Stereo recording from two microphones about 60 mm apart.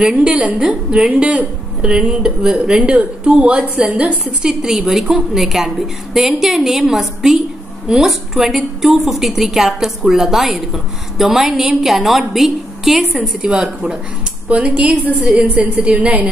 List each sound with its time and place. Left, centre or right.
0.0 s a woman's voice: centre
4.4 s a woman's voice: centre